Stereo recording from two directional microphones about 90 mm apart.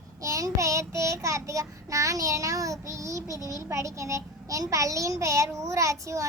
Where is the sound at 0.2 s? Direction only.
35° right (ahead or behind).